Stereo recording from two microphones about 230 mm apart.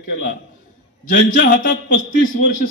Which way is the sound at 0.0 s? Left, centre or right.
Left.